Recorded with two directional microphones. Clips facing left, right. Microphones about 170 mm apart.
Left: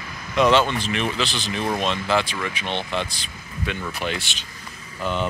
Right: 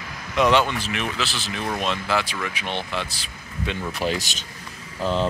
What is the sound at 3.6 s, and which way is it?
Speech, 25° right (ahead or behind).